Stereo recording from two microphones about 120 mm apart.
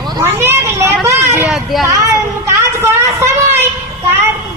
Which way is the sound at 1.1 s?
20° right (ahead or behind).